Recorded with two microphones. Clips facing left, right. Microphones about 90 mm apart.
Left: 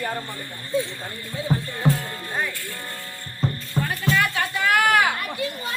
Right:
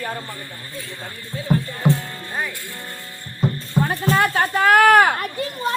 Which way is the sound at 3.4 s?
5° right (ahead or behind).